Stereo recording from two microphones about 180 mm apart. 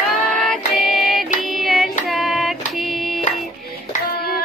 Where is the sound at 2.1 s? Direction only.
Centre (ahead or behind).